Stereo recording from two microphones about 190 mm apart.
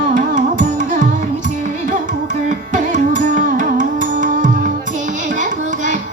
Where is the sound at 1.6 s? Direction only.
40° right (ahead or behind).